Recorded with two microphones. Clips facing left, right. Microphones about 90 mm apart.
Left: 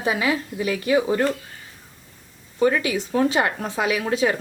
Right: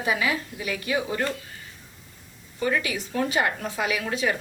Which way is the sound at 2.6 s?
30° left (ahead or behind).